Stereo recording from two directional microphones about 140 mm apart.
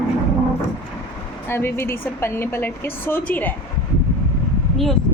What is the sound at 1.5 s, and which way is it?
A woman's voice, 15° left (ahead or behind).